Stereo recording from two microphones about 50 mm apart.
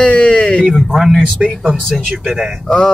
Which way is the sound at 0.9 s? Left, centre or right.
Centre.